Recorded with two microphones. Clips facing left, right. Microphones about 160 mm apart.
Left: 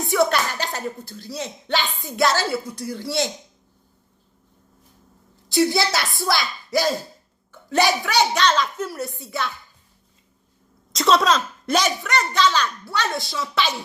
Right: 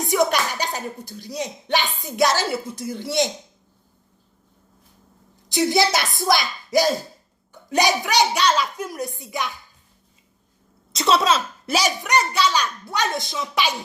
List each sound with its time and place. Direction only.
0.1 s speech: 15° right (ahead or behind)
5.5 s a woman's voice: 20° right (ahead or behind)
10.9 s a woman's voice: centre (ahead or behind)